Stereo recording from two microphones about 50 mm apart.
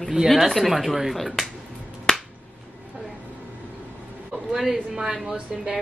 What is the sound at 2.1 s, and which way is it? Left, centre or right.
Finger snapping, centre.